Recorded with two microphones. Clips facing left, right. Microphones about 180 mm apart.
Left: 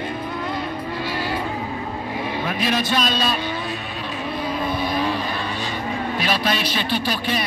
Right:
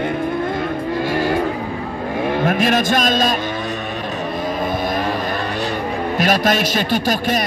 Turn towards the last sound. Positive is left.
turn(degrees=-45)  # may be behind; listen again after turning